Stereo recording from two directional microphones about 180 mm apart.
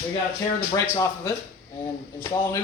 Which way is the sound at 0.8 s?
15° left (ahead or behind).